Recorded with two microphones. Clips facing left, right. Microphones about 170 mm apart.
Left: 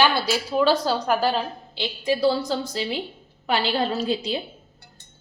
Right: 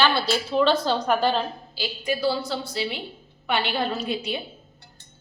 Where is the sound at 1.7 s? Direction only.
25° left (ahead or behind).